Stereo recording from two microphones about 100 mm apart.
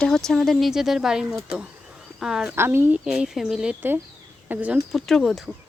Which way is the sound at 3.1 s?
5° right (ahead or behind).